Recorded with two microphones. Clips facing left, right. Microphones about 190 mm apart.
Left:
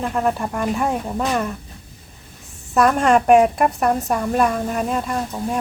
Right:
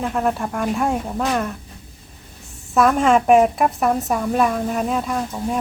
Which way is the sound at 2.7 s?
Centre (ahead or behind).